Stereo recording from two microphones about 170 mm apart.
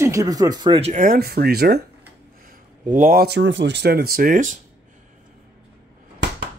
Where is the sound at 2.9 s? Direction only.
55° right (ahead or behind).